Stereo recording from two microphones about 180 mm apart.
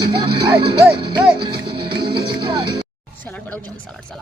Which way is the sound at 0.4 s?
25° right (ahead or behind).